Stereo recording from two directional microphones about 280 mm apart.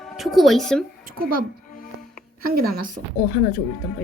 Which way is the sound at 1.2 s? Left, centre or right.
Right.